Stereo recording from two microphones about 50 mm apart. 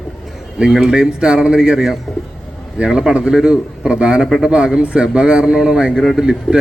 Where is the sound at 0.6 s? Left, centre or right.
Centre.